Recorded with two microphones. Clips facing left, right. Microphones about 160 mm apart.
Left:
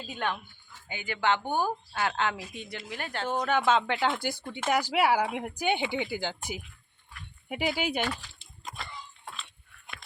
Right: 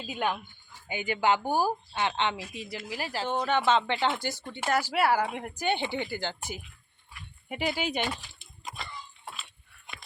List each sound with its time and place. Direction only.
0.1 s a woman's voice: 10° right (ahead or behind); by 8.0 s 10° left (ahead or behind)
8.0 s speech: 15° right (ahead or behind)
8.6 s a sound: 5° right (ahead or behind)